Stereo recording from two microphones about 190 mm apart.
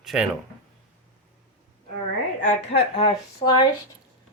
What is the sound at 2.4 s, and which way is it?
Speech, 35° left (ahead or behind).